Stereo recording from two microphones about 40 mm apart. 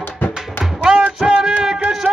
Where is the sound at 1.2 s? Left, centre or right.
Right.